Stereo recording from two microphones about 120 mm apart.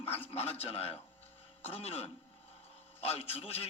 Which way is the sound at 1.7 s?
55° left (ahead or behind).